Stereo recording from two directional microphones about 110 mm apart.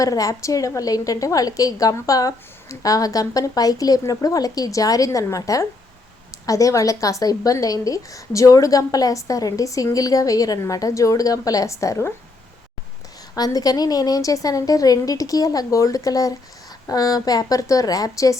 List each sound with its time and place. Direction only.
0.0 s a woman's voice: 30° left (ahead or behind)
13.3 s a woman's voice: 35° left (ahead or behind)